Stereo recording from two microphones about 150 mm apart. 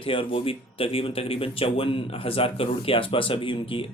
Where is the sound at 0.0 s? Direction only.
35° left (ahead or behind).